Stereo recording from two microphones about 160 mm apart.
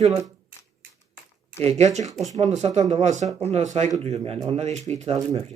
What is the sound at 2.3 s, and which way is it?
Speech, 45° right (ahead or behind).